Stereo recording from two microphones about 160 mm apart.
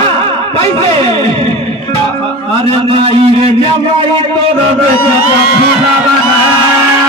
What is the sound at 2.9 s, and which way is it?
Speech, 35° right (ahead or behind).